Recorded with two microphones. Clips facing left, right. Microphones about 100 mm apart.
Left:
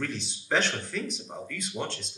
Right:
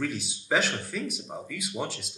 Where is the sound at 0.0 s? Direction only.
5° right (ahead or behind).